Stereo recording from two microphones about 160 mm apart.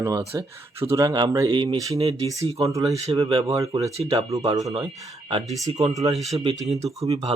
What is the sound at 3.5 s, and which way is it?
Speech, 20° right (ahead or behind).